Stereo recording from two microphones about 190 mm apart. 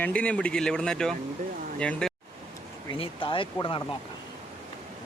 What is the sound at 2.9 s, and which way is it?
Speech, 25° left (ahead or behind).